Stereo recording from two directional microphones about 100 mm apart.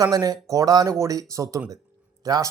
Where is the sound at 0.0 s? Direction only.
40° right (ahead or behind).